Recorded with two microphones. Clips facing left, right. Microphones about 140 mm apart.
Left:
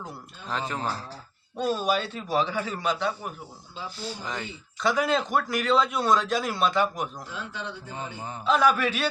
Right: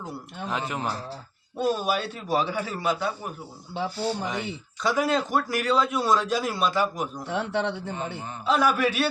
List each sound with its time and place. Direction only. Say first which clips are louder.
0.4 s a man's voice: right 1 dB; 10° right (ahead or behind)
3.8 s a man's voice: right 9 dB; 65° right (ahead or behind)
4.8 s speech: even; centre (ahead or behind)
7.3 s a man's voice: right 10 dB; 70° right (ahead or behind)
8.4 s a man's voice: even; 10° right (ahead or behind)